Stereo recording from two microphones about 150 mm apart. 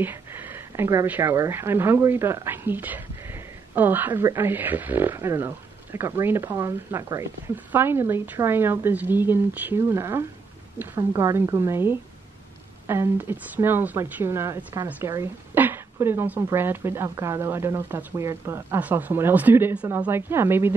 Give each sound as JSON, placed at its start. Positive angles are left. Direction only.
{"t": 0.0, "sound": "speech", "side_deg": -15}